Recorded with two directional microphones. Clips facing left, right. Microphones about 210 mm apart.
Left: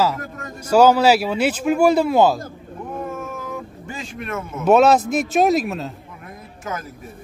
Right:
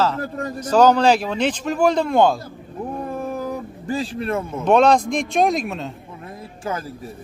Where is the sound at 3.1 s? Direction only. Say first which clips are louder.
Right 4 dB; 35° right (ahead or behind).